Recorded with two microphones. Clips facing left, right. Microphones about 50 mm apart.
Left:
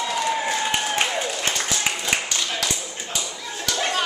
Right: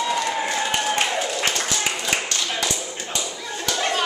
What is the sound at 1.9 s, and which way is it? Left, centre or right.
Clapping, centre.